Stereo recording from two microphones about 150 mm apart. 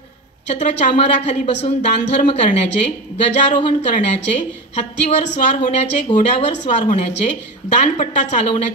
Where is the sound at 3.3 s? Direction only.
50° left (ahead or behind).